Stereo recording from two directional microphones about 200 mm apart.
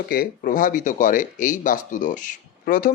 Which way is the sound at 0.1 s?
45° left (ahead or behind).